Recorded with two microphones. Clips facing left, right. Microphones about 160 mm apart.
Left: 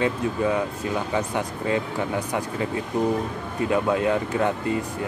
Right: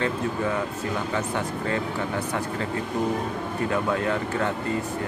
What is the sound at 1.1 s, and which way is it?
Speech, 15° left (ahead or behind).